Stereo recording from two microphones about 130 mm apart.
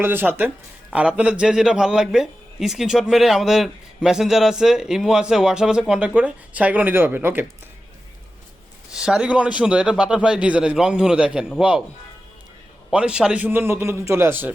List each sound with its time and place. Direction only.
0.0 s a man's voice: 15° right (ahead or behind)
8.9 s a man's voice: 5° right (ahead or behind)
12.9 s a man's voice: 10° right (ahead or behind)